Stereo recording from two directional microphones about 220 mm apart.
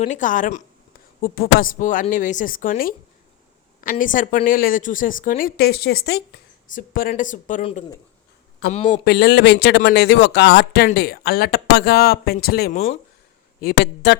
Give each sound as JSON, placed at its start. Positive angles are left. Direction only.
{"t": 0.0, "sound": "a woman's voice", "side_deg": 35}
{"t": 9.0, "sound": "speech", "side_deg": 50}
{"t": 12.7, "sound": "a woman's voice", "side_deg": 30}
{"t": 13.6, "sound": "speech", "side_deg": 45}